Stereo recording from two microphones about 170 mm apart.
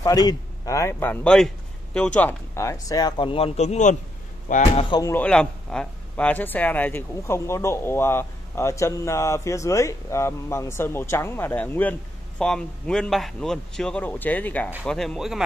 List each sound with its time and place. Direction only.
0.0 s speech: 20° left (ahead or behind); by 4.8 s 45° left (ahead or behind)
4.8 s speech: 25° left (ahead or behind)
5.1 s speech: 5° left (ahead or behind)